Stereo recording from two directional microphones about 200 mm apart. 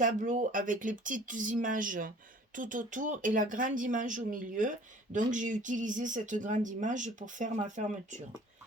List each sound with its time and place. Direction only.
0.0 s speech: 40° right (ahead or behind)